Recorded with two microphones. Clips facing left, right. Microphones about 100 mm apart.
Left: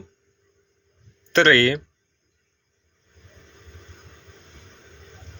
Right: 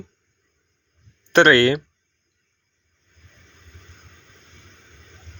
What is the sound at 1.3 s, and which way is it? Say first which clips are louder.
Speech: right 3 dB; 20° right (ahead or behind).